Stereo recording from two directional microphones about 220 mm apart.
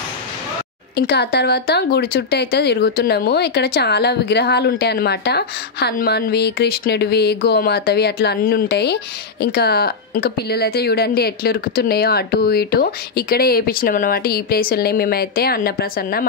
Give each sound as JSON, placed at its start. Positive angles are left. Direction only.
{"t": 0.9, "sound": "speech", "side_deg": 50}